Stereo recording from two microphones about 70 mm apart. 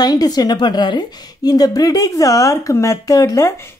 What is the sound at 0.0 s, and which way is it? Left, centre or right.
A woman's voice, left.